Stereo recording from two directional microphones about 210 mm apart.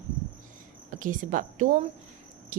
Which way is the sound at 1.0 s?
40° right (ahead or behind).